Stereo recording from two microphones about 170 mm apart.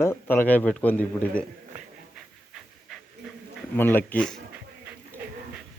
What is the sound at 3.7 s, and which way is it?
Speech, 10° left (ahead or behind).